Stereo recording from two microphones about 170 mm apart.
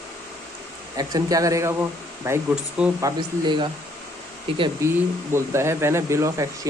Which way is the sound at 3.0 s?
25° right (ahead or behind).